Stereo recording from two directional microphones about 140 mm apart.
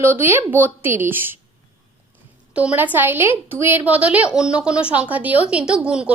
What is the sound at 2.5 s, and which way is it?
A woman's voice, 10° right (ahead or behind).